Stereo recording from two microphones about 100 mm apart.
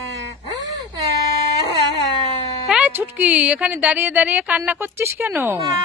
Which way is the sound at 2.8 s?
20° right (ahead or behind).